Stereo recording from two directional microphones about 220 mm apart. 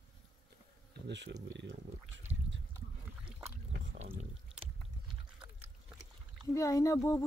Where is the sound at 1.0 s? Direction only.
55° right (ahead or behind).